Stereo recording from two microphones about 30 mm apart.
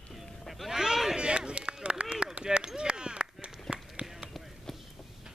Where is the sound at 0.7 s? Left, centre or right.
Centre.